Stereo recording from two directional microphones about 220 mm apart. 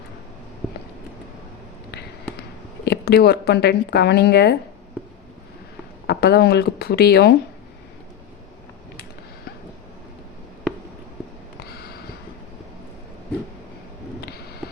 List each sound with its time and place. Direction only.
2.8 s speech: 50° left (ahead or behind)
6.1 s speech: 45° left (ahead or behind)